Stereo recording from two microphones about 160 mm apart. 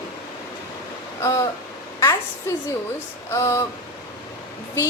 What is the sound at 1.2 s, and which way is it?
Speech, 20° left (ahead or behind).